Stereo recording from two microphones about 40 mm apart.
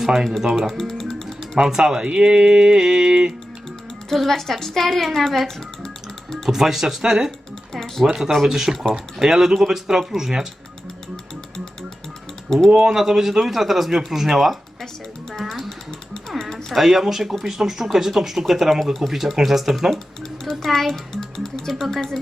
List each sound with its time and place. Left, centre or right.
0.0 s speech: centre
0.7 s speech: centre
1.5 s speech: centre
4.1 s a woman's voice: centre
6.5 s speech: centre
7.3 s typing: centre
8.0 s speech: centre
12.7 s speech: centre
15.3 s a sound: centre
16.4 s typing: centre
16.7 s speech: centre
20.4 s speech: centre